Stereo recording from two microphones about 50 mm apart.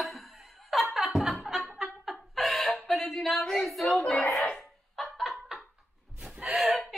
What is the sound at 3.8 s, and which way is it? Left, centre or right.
Speech, centre.